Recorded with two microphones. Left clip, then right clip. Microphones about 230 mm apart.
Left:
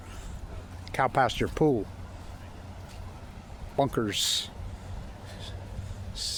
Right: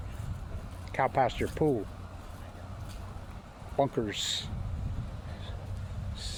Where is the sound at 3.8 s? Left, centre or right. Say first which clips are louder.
Left 2 dB; left.